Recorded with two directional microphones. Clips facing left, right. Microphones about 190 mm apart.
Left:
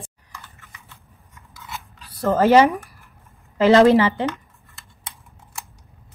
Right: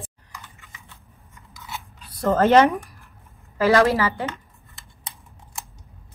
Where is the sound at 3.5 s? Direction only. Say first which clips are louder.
Left 5 dB; 20° left (ahead or behind).